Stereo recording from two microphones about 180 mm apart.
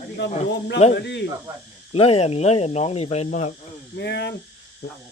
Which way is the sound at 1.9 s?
30° left (ahead or behind).